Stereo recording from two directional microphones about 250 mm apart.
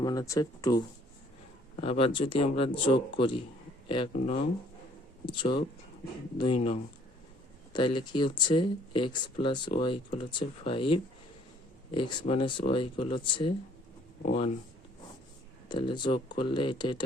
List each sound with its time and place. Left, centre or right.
0.0 s speech: centre
15.7 s speech: centre